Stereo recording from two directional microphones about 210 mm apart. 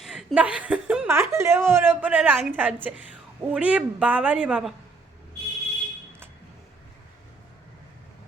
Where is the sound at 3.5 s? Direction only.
5° right (ahead or behind).